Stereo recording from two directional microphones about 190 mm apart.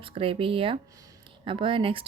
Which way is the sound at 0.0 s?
30° right (ahead or behind).